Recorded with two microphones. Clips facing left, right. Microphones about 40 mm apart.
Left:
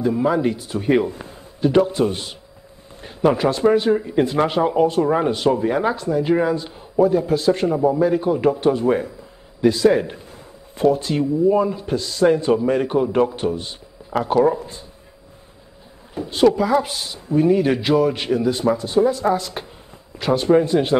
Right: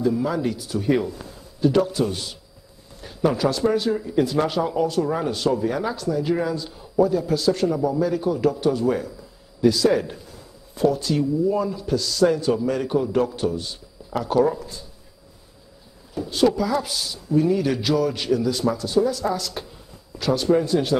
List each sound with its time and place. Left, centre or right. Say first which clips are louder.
0.0 s a man's voice: left 4 dB; left
16.2 s speech: left 4 dB; left